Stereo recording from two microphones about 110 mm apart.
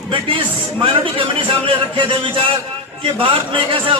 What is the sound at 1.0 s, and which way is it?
A man's voice, 50° right (ahead or behind).